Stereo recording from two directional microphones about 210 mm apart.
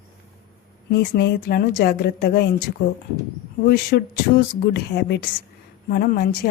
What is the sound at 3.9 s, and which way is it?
A woman's voice, 45° left (ahead or behind).